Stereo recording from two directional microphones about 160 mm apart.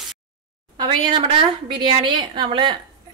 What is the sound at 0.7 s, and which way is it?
A woman's voice, 30° right (ahead or behind).